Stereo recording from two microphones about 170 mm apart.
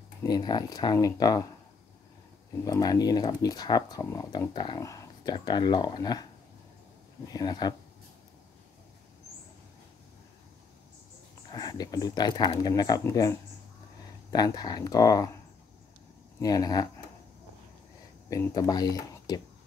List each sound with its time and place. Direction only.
0.2 s speech: 25° left (ahead or behind)
2.6 s speech: 20° left (ahead or behind)
7.3 s speech: 25° left (ahead or behind)
11.5 s speech: 25° left (ahead or behind)
16.3 s speech: 20° left (ahead or behind)
18.3 s speech: 20° left (ahead or behind)